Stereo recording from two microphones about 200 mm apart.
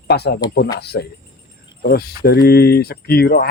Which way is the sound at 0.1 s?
55° left (ahead or behind).